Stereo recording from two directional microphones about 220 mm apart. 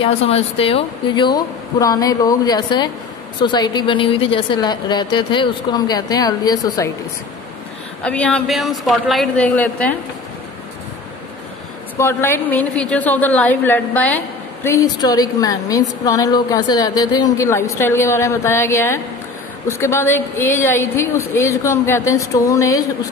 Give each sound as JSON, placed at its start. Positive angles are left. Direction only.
{"t": 0.2, "sound": "a woman's voice", "side_deg": 25}
{"t": 8.0, "sound": "speech", "side_deg": 5}
{"t": 12.0, "sound": "a woman's voice", "side_deg": 10}